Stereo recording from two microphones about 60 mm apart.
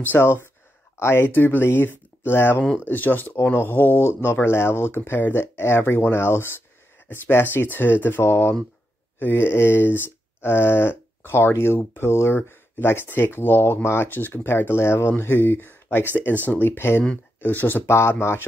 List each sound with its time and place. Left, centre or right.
0.2 s speech: left